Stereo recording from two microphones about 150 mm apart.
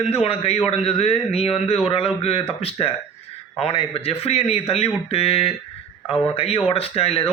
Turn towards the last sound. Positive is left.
turn(degrees=40)  # may be behind; listen again after turning